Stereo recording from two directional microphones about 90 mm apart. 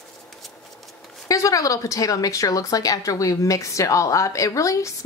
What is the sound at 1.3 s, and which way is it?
A woman's voice, 40° left (ahead or behind).